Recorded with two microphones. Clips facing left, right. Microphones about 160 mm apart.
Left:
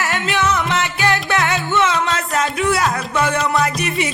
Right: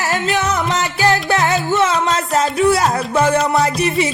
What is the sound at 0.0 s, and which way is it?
Music, 40° right (ahead or behind).